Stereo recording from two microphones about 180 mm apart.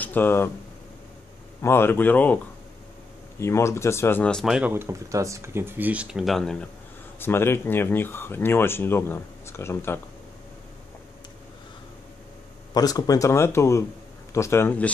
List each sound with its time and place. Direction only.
0.0 s speech: 10° left (ahead or behind)
1.6 s speech: 15° left (ahead or behind)
12.7 s speech: 20° left (ahead or behind)